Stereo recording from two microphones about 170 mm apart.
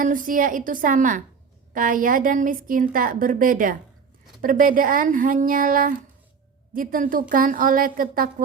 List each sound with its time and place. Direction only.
0.0 s a woman's voice: 50° right (ahead or behind)